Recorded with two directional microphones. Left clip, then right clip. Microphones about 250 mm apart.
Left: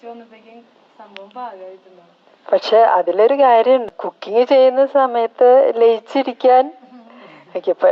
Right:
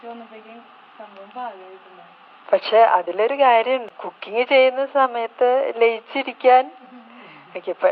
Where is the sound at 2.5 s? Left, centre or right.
Left.